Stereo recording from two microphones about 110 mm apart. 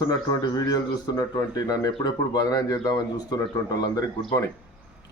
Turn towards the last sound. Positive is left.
turn(degrees=35)  # may be behind; listen again after turning